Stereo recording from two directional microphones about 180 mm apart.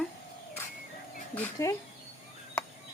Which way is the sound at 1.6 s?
15° left (ahead or behind).